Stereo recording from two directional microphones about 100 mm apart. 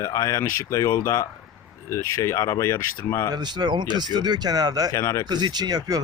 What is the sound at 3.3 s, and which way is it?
Speech, 45° right (ahead or behind).